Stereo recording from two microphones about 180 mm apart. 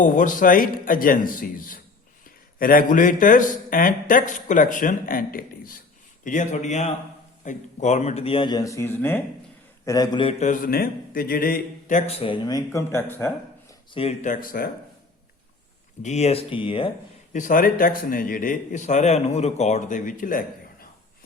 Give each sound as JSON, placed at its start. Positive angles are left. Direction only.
{"t": 0.0, "sound": "speech", "side_deg": 45}
{"t": 9.8, "sound": "speech", "side_deg": 20}
{"t": 10.4, "sound": "speech", "side_deg": 50}
{"t": 13.9, "sound": "speech", "side_deg": 35}
{"t": 16.0, "sound": "speech", "side_deg": 35}
{"t": 17.3, "sound": "speech", "side_deg": 45}